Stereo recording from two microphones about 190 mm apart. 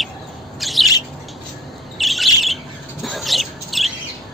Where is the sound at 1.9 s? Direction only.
Centre (ahead or behind).